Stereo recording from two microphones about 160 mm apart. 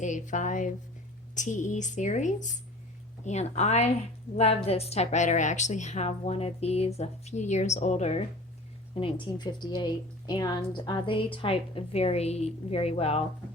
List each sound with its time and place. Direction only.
0.0 s a woman's voice: 50° left (ahead or behind)
9.0 s a woman's voice: 30° left (ahead or behind)